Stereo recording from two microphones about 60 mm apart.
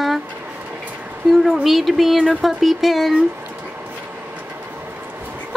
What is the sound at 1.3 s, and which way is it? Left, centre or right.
Speech, centre.